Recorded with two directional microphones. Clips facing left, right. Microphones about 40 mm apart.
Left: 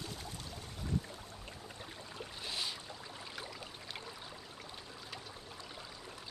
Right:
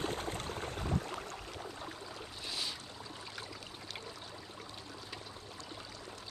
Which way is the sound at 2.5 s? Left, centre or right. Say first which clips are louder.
Even; centre.